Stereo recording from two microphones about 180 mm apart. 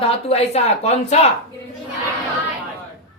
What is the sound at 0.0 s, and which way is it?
A woman's voice, 35° left (ahead or behind).